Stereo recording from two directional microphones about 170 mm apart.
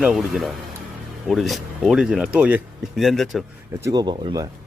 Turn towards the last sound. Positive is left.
turn(degrees=-25)  # may be behind; listen again after turning